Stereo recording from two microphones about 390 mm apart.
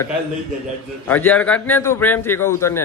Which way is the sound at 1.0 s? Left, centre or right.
Centre.